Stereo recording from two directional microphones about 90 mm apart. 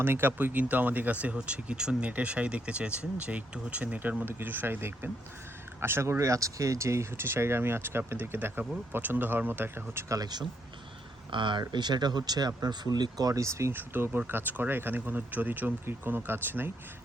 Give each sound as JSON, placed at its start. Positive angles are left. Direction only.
{"t": 0.0, "sound": "speech", "side_deg": -25}
{"t": 10.2, "sound": "speech", "side_deg": -50}
{"t": 11.3, "sound": "speech", "side_deg": -60}